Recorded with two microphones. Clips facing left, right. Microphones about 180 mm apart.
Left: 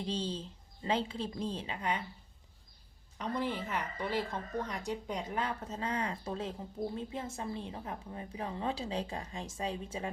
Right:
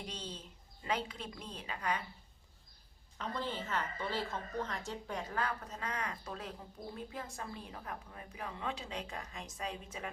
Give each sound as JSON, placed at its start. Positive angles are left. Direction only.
{"t": 0.0, "sound": "a woman's voice", "side_deg": 30}
{"t": 3.2, "sound": "a woman's voice", "side_deg": 15}